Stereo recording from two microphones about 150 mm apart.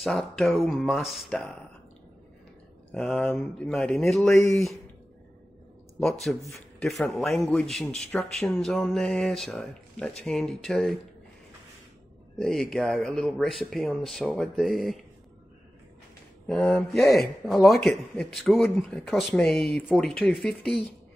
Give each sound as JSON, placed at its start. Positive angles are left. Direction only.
{"t": 0.0, "sound": "speech", "side_deg": 0}
{"t": 2.9, "sound": "speech", "side_deg": 5}
{"t": 4.4, "sound": "speech", "side_deg": 20}
{"t": 5.9, "sound": "speech", "side_deg": 5}
{"t": 12.4, "sound": "speech", "side_deg": 5}
{"t": 16.4, "sound": "speech", "side_deg": 5}